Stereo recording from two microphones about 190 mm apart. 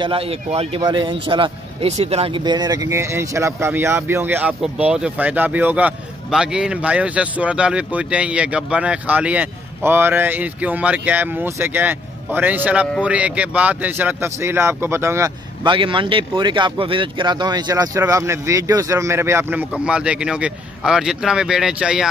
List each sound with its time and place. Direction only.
0.0 s a man's voice: 30° right (ahead or behind); by 15.3 s 15° right (ahead or behind)
15.6 s speech: 25° right (ahead or behind); by 22.1 s 5° right (ahead or behind)